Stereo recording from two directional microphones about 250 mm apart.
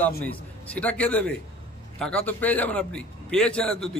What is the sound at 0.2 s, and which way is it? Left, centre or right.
A man's voice, centre.